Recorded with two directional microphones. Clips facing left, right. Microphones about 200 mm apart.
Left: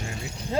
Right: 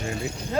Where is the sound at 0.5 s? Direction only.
25° left (ahead or behind).